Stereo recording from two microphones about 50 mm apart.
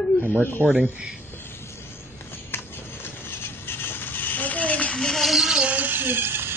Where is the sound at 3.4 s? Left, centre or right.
Left.